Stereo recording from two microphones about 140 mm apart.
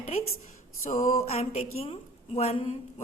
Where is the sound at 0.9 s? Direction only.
65° left (ahead or behind).